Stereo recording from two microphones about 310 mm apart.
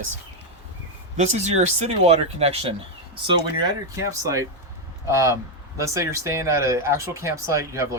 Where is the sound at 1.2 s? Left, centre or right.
Right.